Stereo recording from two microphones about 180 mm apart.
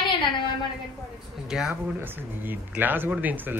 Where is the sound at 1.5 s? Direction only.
5° right (ahead or behind).